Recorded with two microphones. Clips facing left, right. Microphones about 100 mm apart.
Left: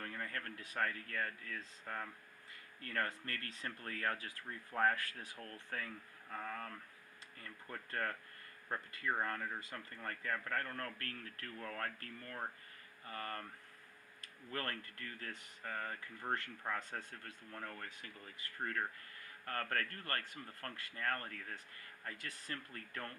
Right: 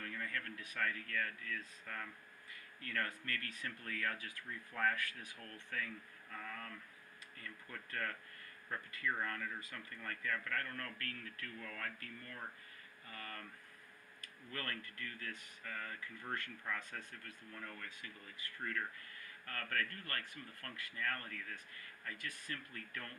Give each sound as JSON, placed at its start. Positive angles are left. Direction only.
{"t": 0.0, "sound": "speech", "side_deg": 35}
{"t": 14.5, "sound": "speech", "side_deg": 30}
{"t": 17.5, "sound": "speech", "side_deg": 40}